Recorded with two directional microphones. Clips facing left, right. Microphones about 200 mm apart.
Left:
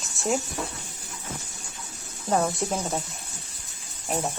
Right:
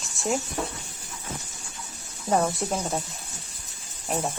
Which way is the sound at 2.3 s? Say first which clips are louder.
Even; 5° right (ahead or behind).